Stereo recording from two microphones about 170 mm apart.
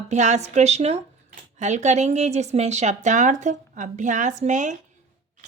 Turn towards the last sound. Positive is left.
turn(degrees=-45)  # may be behind; listen again after turning